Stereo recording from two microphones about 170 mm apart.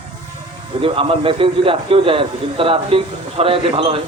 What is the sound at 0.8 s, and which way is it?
A man's voice, 35° right (ahead or behind).